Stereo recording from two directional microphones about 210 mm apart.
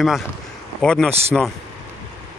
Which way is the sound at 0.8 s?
5° left (ahead or behind).